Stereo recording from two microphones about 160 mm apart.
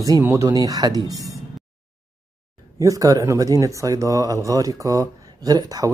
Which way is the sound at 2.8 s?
20° right (ahead or behind).